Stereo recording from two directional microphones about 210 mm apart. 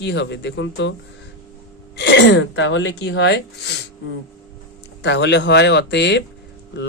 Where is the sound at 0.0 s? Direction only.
55° left (ahead or behind).